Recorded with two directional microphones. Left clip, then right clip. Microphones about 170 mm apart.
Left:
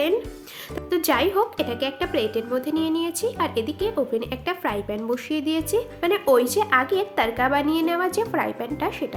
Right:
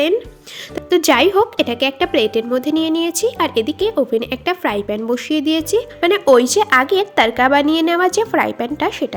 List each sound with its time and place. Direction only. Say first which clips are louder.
0.9 s a woman's voice: right 9 dB; 40° right (ahead or behind)